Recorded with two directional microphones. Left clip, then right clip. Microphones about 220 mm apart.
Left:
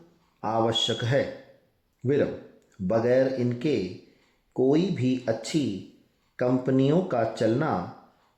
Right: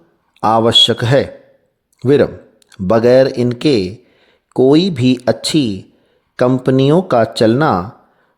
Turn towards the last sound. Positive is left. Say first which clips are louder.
# right 13 dB
turn(degrees=-45)  # may be behind; listen again after turning